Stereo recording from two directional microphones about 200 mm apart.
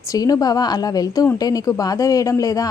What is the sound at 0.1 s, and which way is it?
A woman's voice, 20° left (ahead or behind).